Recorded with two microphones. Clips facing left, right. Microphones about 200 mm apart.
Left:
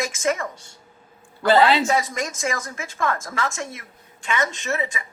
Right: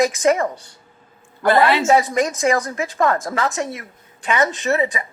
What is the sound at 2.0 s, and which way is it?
A woman's voice, 35° right (ahead or behind).